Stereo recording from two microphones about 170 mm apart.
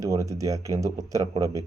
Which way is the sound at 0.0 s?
20° right (ahead or behind).